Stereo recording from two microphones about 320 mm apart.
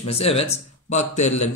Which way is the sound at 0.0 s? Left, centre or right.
Centre.